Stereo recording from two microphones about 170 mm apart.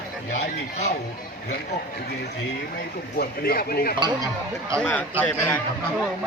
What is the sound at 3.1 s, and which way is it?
Speech, 65° left (ahead or behind).